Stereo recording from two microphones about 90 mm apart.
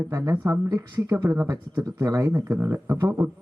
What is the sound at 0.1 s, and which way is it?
Speech, 35° right (ahead or behind).